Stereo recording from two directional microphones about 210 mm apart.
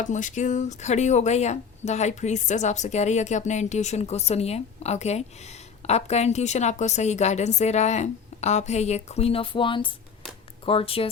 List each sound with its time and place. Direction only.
0.0 s speech: 35° left (ahead or behind)